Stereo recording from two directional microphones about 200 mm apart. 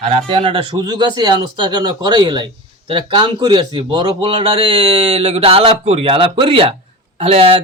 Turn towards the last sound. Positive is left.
turn(degrees=-30)  # may be behind; listen again after turning